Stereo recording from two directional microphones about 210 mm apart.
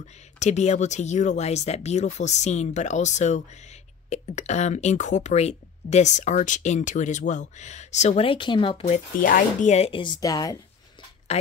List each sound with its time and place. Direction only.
0.0 s speech: 35° left (ahead or behind); by 10.6 s 15° left (ahead or behind)
11.3 s a woman's voice: 30° left (ahead or behind)